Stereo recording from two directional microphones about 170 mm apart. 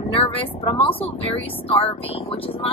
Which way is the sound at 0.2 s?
35° left (ahead or behind).